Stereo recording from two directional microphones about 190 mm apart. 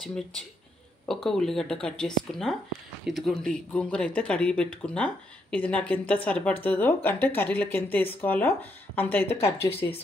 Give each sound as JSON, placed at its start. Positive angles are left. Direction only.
{"t": 1.0, "sound": "speech", "side_deg": 0}